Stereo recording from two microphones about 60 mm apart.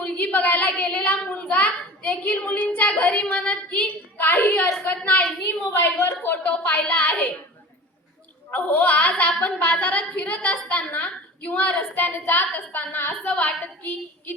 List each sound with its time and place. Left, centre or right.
0.0 s a sound: left
5.0 s a woman's voice: left
5.7 s a woman's voice: left
8.4 s a woman's voice: left
9.3 s a woman's voice: centre
9.6 s a woman's voice: left